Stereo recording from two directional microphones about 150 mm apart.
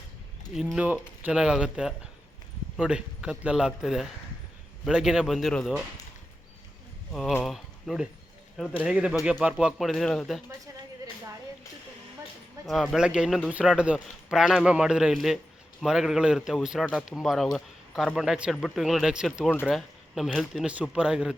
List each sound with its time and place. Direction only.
0.5 s a man's voice: 5° right (ahead or behind)
7.1 s a man's voice: centre (ahead or behind)
12.6 s a man's voice: centre (ahead or behind)